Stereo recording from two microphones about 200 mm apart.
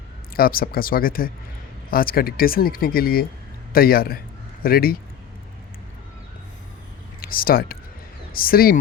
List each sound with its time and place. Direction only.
0.3 s speech: 45° left (ahead or behind)
7.2 s speech: 45° left (ahead or behind)